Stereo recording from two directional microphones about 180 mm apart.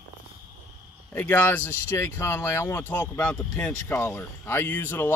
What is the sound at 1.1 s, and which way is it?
Speech, 10° left (ahead or behind).